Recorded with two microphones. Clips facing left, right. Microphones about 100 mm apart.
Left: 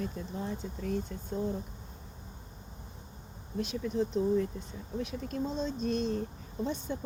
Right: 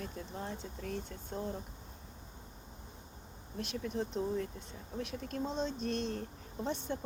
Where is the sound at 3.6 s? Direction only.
60° right (ahead or behind).